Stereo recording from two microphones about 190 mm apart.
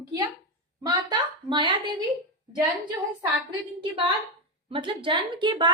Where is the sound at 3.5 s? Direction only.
25° right (ahead or behind).